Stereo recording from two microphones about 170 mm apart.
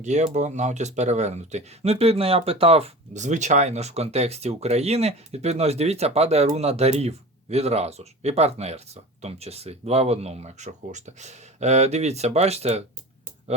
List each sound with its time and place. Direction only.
0.0 s speech: 45° right (ahead or behind)